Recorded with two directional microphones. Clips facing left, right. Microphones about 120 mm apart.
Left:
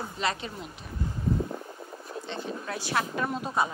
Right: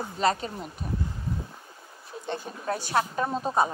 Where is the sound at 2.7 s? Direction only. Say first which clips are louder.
Right 5 dB; 35° right (ahead or behind).